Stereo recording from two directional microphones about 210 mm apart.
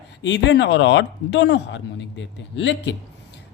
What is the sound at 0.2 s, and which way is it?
Speech, 55° left (ahead or behind).